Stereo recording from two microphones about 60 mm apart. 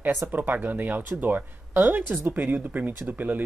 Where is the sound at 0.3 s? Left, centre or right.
Right.